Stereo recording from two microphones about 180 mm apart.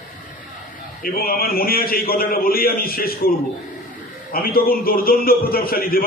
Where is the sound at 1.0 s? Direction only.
55° left (ahead or behind).